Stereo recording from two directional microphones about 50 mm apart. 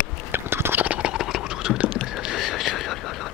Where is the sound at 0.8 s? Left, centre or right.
Right.